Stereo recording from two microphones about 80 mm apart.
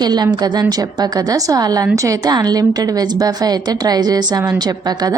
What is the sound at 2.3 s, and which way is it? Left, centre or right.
A woman's voice, right.